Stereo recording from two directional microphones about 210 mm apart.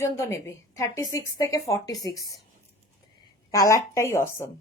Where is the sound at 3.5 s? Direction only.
15° left (ahead or behind).